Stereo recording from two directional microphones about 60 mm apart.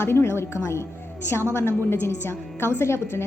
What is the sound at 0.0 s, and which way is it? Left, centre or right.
A woman's voice, left.